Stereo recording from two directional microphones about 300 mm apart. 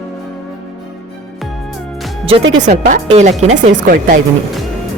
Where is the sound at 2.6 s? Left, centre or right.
Right.